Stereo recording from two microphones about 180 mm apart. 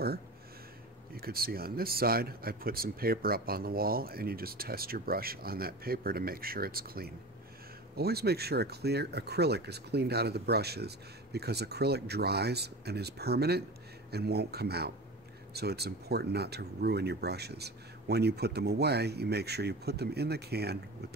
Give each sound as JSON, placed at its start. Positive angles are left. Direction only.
{"t": 1.1, "sound": "speech", "side_deg": -55}